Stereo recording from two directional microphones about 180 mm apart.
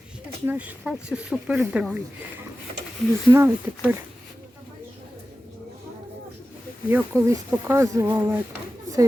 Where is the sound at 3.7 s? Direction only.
15° right (ahead or behind).